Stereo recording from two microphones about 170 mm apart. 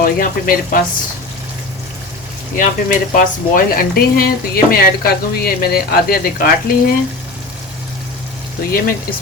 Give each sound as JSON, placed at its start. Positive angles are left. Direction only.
{"t": 0.0, "sound": "speech", "side_deg": 55}
{"t": 2.6, "sound": "speech", "side_deg": 50}